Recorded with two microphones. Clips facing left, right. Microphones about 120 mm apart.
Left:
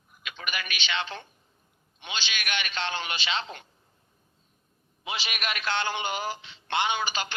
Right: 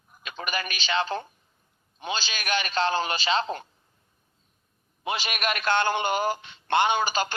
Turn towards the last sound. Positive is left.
turn(degrees=-45)  # may be behind; listen again after turning